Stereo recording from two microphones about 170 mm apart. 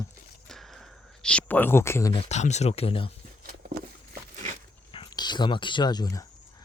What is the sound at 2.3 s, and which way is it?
Speech, 40° left (ahead or behind).